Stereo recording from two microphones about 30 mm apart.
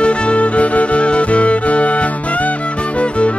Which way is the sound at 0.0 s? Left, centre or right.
Left.